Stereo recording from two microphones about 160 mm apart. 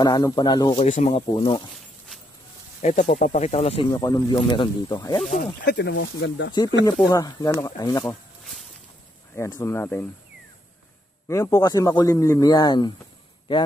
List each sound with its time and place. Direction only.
0.0 s a man's voice: 25° left (ahead or behind)
0.8 s speech: 40° left (ahead or behind)
2.8 s speech: 50° left (ahead or behind)
3.9 s a man's voice: 25° left (ahead or behind)
5.6 s speech: 90° left
6.5 s a man's voice: 25° left (ahead or behind)
9.3 s speech: 15° left (ahead or behind)
11.2 s a man's voice: 20° left (ahead or behind)